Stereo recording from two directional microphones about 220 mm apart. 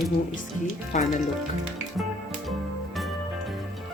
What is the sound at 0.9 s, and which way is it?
Speech, 30° left (ahead or behind).